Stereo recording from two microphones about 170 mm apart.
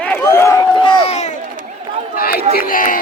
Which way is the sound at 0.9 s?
30° left (ahead or behind).